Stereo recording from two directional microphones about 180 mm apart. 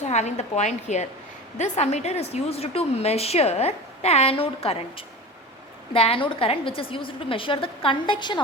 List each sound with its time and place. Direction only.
0.0 s a woman's voice: 40° left (ahead or behind)